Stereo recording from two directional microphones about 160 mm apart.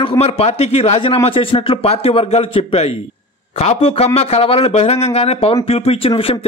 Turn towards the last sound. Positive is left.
turn(degrees=35)  # may be behind; listen again after turning